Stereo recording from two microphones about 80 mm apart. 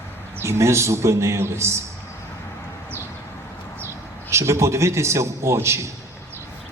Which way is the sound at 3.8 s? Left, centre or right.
Right.